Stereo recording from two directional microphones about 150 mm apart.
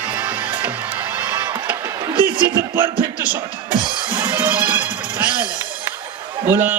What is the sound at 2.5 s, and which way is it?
Speech, 15° right (ahead or behind).